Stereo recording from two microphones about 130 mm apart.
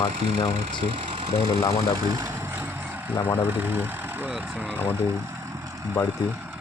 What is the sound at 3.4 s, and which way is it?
Speech, 15° right (ahead or behind).